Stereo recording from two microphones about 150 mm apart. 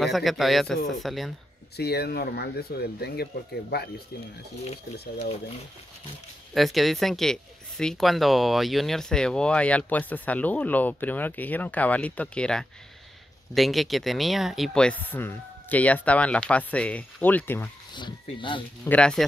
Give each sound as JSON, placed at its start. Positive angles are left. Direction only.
{"t": 0.0, "sound": "a man's voice", "side_deg": 0}
{"t": 1.8, "sound": "speech", "side_deg": 90}
{"t": 6.5, "sound": "speech", "side_deg": 0}
{"t": 17.9, "sound": "speech", "side_deg": 30}
{"t": 18.9, "sound": "speech", "side_deg": 5}